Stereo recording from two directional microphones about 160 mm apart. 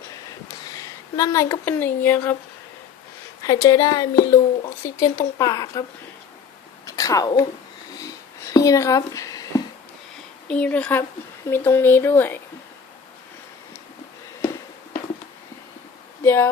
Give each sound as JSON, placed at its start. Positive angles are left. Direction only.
{"t": 0.7, "sound": "speech", "side_deg": 20}
{"t": 3.4, "sound": "speech", "side_deg": 20}
{"t": 6.8, "sound": "a sound", "side_deg": 20}
{"t": 10.5, "sound": "a woman's voice", "side_deg": 5}
{"t": 16.2, "sound": "speech", "side_deg": 15}